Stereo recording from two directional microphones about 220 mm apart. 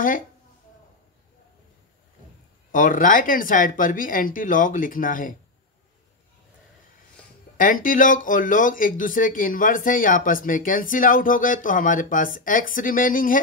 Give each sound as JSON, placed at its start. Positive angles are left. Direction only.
{"t": 2.7, "sound": "speech", "side_deg": 35}
{"t": 7.5, "sound": "speech", "side_deg": 40}